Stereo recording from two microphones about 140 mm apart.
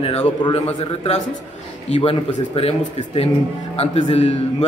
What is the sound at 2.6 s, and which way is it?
A man's voice, 45° left (ahead or behind).